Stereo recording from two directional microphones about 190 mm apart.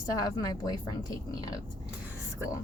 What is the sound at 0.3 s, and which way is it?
A woman's voice, 20° left (ahead or behind).